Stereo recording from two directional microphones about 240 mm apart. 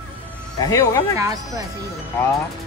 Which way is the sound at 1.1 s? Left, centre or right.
Centre.